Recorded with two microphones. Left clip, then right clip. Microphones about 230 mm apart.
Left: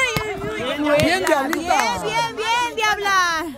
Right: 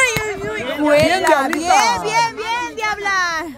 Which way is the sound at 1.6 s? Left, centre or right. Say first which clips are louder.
Right 5 dB; centre.